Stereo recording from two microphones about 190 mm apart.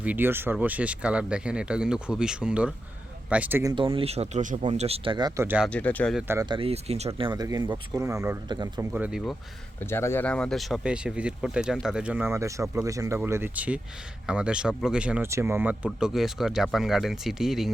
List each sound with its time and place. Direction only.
0.0 s speech: 10° right (ahead or behind)
5.6 s speech: 5° left (ahead or behind)
6.1 s speech: 10° right (ahead or behind)
6.4 s speech: 25° right (ahead or behind)
7.2 s speech: 20° right (ahead or behind); by 9.3 s 5° right (ahead or behind)
9.8 s speech: 15° left (ahead or behind)